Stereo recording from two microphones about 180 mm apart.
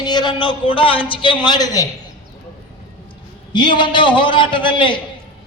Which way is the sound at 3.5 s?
25° left (ahead or behind).